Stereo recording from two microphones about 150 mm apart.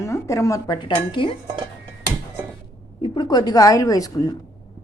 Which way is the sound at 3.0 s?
30° left (ahead or behind).